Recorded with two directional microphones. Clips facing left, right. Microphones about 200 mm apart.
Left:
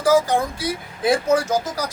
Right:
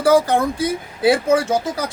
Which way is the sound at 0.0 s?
60° right (ahead or behind).